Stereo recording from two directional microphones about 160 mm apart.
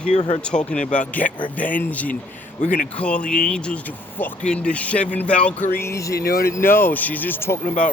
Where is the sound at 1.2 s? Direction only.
50° left (ahead or behind).